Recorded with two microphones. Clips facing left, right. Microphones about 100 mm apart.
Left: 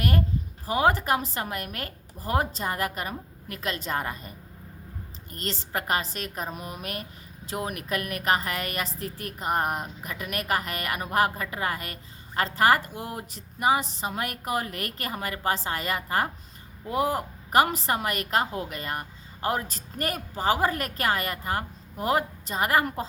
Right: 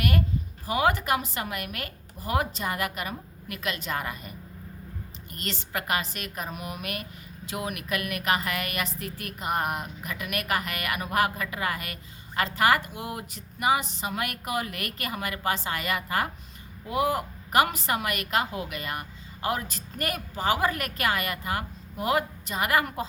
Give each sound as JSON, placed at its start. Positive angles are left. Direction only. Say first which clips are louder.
{"t": 0.7, "sound": "a woman's voice", "louder": "left 1 dB", "side_deg": 35}